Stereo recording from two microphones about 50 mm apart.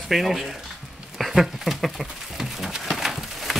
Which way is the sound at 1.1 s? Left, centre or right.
Centre.